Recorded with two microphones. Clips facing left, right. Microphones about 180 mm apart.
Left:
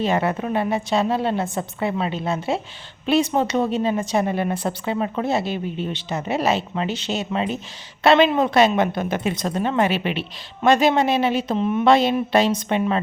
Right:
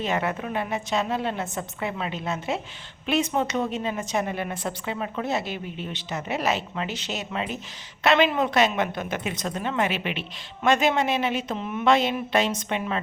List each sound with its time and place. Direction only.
0.0 s a woman's voice: 35° left (ahead or behind)